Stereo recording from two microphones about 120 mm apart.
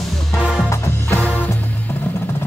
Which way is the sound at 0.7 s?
15° left (ahead or behind).